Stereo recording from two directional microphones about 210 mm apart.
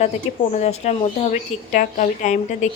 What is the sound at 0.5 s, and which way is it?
Speech, 30° left (ahead or behind).